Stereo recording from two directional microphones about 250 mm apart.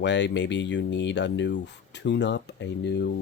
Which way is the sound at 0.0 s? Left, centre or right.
Left.